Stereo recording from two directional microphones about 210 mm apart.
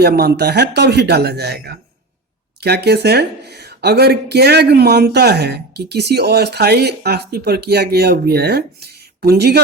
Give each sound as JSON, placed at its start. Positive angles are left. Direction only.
{"t": 0.0, "sound": "speech", "side_deg": -50}